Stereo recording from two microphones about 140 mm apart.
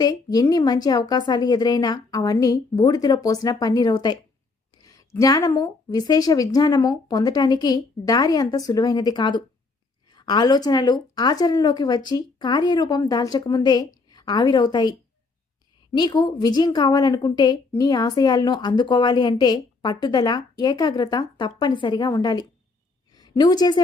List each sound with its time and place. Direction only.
0.0 s a woman's voice: 30° left (ahead or behind)